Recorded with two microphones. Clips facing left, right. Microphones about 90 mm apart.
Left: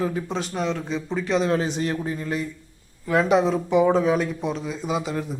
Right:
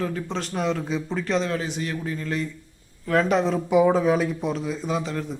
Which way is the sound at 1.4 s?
30° left (ahead or behind).